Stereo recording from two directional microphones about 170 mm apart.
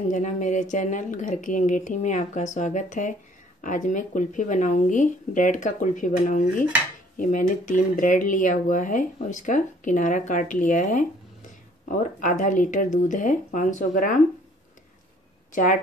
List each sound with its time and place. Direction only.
0.1 s speech: 45° left (ahead or behind)
12.2 s speech: 50° left (ahead or behind)
15.5 s speech: 55° left (ahead or behind)